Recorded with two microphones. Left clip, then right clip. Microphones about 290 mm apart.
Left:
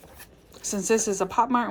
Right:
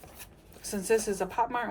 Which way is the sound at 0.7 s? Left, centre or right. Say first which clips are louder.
Left 3 dB; centre.